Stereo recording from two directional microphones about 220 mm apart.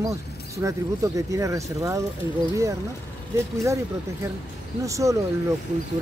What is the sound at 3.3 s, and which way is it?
Speech, 15° right (ahead or behind).